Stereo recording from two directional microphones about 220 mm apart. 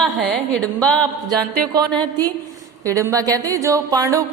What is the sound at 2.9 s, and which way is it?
Speech, 15° right (ahead or behind).